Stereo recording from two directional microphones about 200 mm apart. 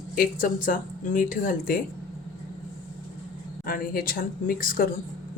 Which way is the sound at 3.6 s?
45° left (ahead or behind).